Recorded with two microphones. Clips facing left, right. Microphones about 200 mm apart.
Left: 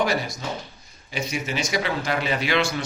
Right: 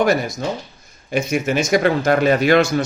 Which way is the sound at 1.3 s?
45° right (ahead or behind).